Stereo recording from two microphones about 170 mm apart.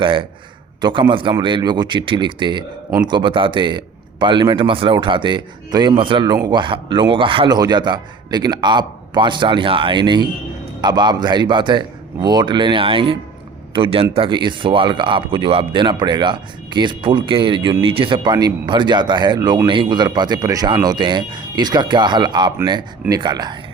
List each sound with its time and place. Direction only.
0.0 s speech: 30° right (ahead or behind)